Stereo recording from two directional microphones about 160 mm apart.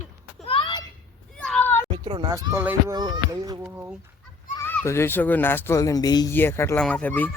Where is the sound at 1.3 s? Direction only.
5° left (ahead or behind).